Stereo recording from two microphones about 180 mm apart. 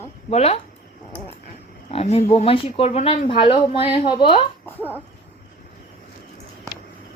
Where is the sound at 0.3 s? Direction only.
35° left (ahead or behind).